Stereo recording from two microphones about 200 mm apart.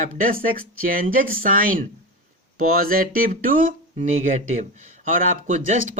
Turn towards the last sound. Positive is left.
turn(degrees=-40)  # may be behind; listen again after turning